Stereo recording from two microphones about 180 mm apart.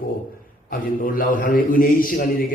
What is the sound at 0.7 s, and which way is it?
Speech, 50° left (ahead or behind).